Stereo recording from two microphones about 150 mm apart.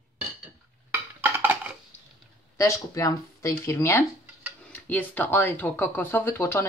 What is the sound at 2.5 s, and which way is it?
Speech, 20° left (ahead or behind).